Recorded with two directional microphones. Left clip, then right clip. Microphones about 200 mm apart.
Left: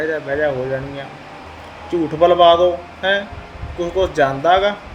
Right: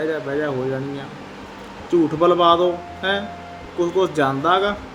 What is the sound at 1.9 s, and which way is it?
Speech, 20° right (ahead or behind).